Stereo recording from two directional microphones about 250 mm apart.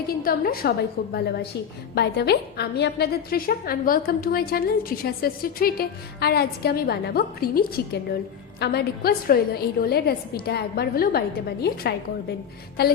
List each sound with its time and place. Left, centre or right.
0.2 s a woman's voice: left
8.6 s a woman's voice: left